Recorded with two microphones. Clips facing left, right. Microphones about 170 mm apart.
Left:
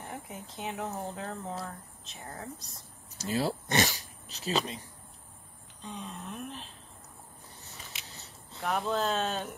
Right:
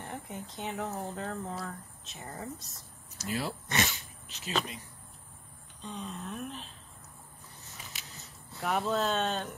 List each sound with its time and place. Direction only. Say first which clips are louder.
0.0 s speech: right 1 dB; centre (ahead or behind)
3.2 s speech: left 4 dB; 30° left (ahead or behind)
5.8 s speech: right 1 dB; centre (ahead or behind)
8.1 s a sound: even; 30° left (ahead or behind)
8.6 s speech: even; centre (ahead or behind)